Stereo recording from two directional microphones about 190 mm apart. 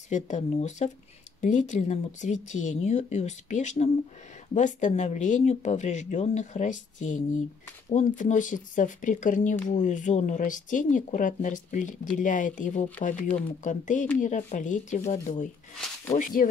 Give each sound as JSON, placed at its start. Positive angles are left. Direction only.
{"t": 0.1, "sound": "speech", "side_deg": 35}